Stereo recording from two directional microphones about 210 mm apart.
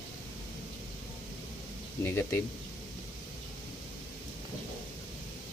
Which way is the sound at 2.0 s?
10° left (ahead or behind).